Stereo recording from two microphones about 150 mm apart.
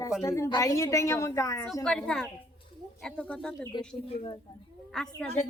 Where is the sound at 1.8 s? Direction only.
5° left (ahead or behind).